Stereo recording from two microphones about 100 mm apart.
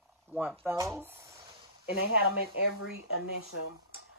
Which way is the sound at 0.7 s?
30° right (ahead or behind).